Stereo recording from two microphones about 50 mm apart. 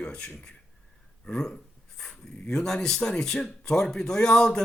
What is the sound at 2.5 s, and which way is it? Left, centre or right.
Speech, centre.